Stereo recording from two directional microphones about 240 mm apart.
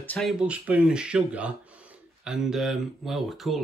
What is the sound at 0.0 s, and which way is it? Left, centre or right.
Speech, centre.